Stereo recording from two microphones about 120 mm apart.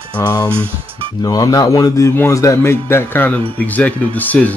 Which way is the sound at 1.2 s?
30° left (ahead or behind).